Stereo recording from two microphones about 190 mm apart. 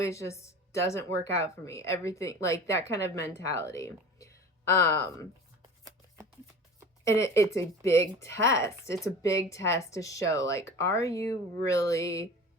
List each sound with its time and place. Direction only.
0.0 s speech: 15° left (ahead or behind)
7.0 s speech: 15° left (ahead or behind)